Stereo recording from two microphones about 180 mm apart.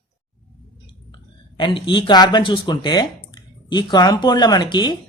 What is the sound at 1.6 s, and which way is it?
A man's voice, 25° left (ahead or behind).